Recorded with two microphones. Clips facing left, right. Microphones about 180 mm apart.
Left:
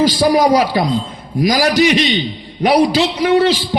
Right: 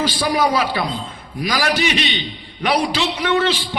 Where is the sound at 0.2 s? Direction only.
35° left (ahead or behind).